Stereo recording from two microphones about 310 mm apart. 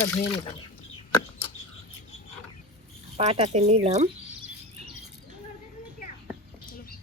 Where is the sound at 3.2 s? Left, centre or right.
Centre.